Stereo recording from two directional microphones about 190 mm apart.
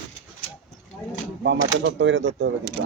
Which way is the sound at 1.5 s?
70° right (ahead or behind).